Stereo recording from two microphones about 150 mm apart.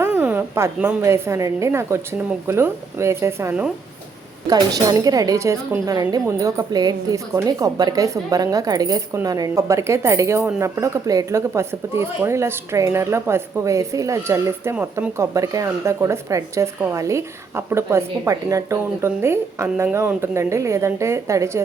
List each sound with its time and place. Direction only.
0.0 s a woman's voice: 10° right (ahead or behind)
4.9 s a woman's voice: 25° right (ahead or behind)